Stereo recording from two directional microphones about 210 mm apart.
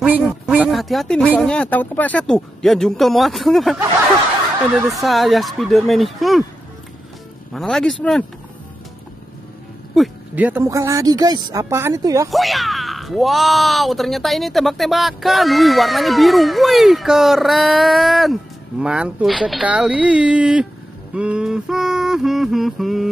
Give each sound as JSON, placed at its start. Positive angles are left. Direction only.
{"t": 0.5, "sound": "a sound", "side_deg": -5}
{"t": 1.2, "sound": "speech", "side_deg": -5}
{"t": 1.5, "sound": "speech", "side_deg": 5}
{"t": 4.9, "sound": "speech", "side_deg": 0}
{"t": 7.5, "sound": "speech", "side_deg": 0}
{"t": 9.9, "sound": "speech", "side_deg": -5}
{"t": 12.3, "sound": "speech", "side_deg": 0}